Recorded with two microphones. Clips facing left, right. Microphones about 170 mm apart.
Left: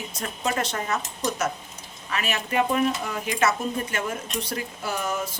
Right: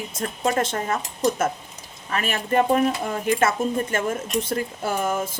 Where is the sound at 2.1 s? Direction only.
50° right (ahead or behind).